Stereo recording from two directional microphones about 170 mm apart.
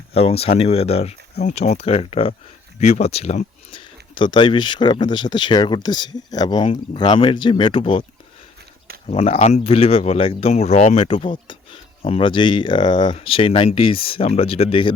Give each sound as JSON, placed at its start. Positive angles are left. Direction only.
{"t": 0.1, "sound": "speech", "side_deg": 35}
{"t": 9.0, "sound": "speech", "side_deg": 35}